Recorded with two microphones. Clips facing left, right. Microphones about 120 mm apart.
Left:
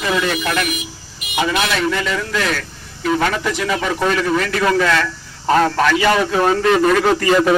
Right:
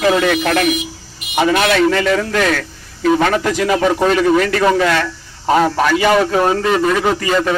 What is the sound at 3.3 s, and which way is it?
Speech, 75° right (ahead or behind).